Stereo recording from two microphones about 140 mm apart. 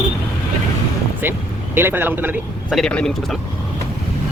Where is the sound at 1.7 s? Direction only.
15° right (ahead or behind).